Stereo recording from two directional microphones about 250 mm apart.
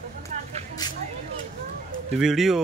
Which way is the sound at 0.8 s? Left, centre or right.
Centre.